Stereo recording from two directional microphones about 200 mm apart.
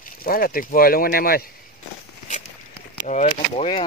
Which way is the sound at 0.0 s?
45° left (ahead or behind).